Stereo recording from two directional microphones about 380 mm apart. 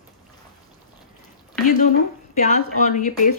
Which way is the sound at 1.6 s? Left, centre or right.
Centre.